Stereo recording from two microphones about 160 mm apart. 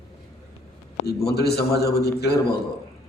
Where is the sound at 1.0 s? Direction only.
90° left.